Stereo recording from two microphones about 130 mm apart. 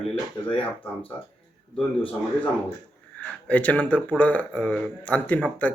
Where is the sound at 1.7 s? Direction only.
10° left (ahead or behind).